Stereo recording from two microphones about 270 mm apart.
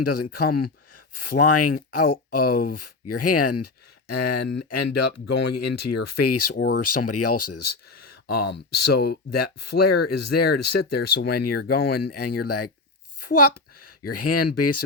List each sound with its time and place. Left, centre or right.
0.0 s speech: left
11.2 s speech: left
12.5 s speech: left